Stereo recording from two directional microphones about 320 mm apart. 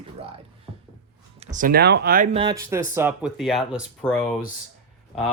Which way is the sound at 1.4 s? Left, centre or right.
Right.